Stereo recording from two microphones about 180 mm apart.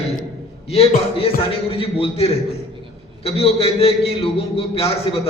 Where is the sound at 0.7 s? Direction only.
35° left (ahead or behind).